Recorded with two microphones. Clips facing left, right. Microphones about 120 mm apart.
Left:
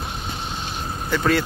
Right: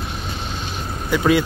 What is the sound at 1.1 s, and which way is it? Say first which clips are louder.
Speech: right 4 dB; 10° right (ahead or behind).